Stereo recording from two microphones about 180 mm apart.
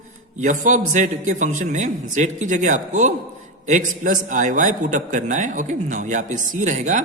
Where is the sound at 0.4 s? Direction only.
45° right (ahead or behind).